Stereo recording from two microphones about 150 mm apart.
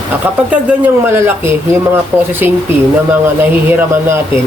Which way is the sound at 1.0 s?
15° right (ahead or behind).